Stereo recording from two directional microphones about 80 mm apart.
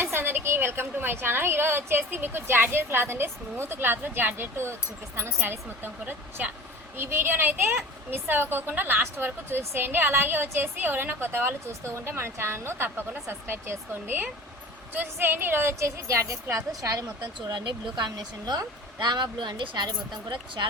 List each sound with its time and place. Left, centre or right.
0.0 s a woman's voice: right
17.5 s speech: right